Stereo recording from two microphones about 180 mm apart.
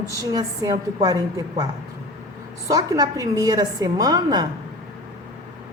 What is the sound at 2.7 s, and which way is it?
A woman's voice, 20° right (ahead or behind).